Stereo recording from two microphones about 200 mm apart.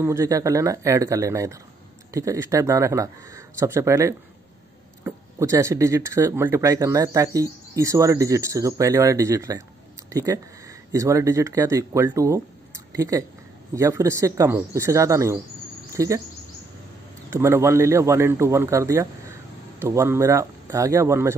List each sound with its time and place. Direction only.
0.0 s speech: 15° right (ahead or behind)
17.3 s speech: 15° right (ahead or behind)